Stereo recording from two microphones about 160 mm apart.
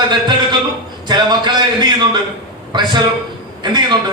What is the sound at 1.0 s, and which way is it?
A man's voice, 25° right (ahead or behind).